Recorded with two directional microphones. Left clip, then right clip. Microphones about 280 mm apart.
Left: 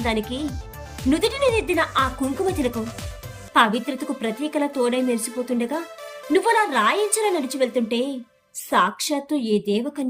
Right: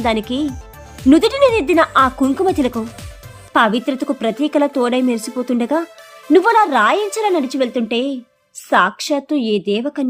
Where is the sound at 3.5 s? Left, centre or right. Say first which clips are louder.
Right 4 dB; centre.